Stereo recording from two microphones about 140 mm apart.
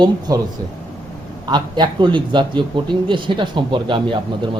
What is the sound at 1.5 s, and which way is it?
A man's voice, 30° right (ahead or behind).